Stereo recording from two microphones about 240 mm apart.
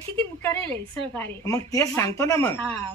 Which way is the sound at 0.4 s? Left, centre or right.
Centre.